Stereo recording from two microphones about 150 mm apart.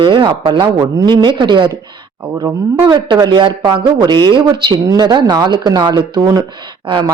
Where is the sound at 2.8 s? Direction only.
30° right (ahead or behind).